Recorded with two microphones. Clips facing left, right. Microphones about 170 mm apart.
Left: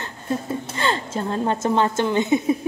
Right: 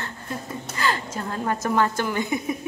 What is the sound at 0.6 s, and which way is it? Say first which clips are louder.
A woman's voice: left 2 dB; 25° left (ahead or behind).